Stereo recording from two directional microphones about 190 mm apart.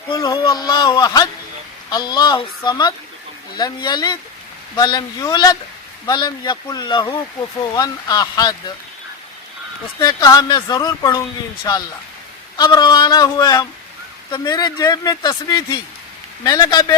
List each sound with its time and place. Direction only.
0.1 s speech: 25° left (ahead or behind)
10.0 s speech: 20° left (ahead or behind)